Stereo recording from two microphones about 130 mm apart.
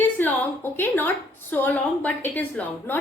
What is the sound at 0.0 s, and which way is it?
A woman's voice, 15° left (ahead or behind).